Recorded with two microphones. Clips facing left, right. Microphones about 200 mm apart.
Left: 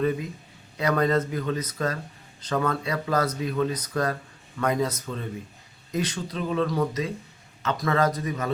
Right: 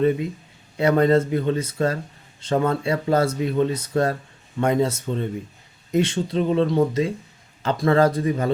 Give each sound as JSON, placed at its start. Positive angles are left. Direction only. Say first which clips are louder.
{"t": 0.0, "sound": "speech", "louder": "right 5 dB", "side_deg": -25}